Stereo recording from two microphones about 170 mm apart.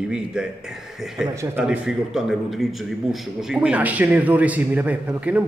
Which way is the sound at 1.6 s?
5° right (ahead or behind).